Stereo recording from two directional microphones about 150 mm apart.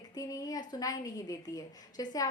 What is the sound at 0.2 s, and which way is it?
A woman's voice, 25° left (ahead or behind).